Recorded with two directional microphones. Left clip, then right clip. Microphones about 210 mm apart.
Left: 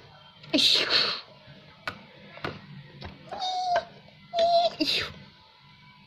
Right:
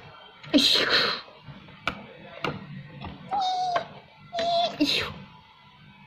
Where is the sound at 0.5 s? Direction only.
Centre (ahead or behind).